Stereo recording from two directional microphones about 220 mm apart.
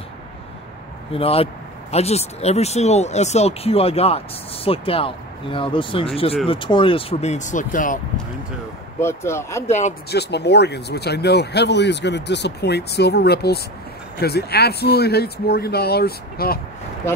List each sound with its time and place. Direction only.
1.1 s speech: 25° left (ahead or behind)
9.0 s speech: 10° left (ahead or behind)
9.7 s speech: 30° left (ahead or behind)
10.0 s speech: 50° left (ahead or behind)